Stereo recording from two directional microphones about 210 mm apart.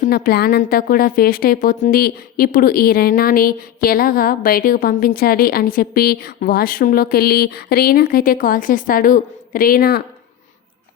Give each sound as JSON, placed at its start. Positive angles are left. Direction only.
{"t": 0.0, "sound": "a woman's voice", "side_deg": 45}